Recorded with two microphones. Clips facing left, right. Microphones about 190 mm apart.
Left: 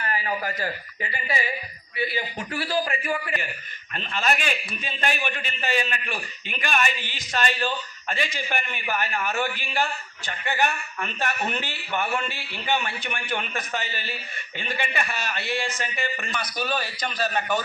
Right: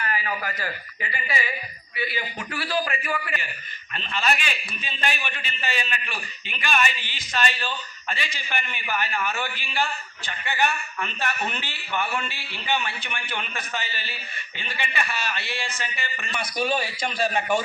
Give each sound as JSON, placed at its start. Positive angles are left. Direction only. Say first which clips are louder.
{"t": 0.0, "sound": "speech", "louder": "left 1 dB", "side_deg": 35}
{"t": 2.5, "sound": "a man's voice", "louder": "left 1 dB", "side_deg": 25}
{"t": 3.9, "sound": "a man's voice", "louder": "even", "side_deg": 45}
{"t": 16.6, "sound": "a man's voice", "louder": "right 3 dB", "side_deg": -25}